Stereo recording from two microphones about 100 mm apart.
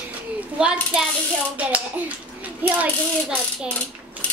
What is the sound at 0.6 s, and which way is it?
Speech, 5° right (ahead or behind).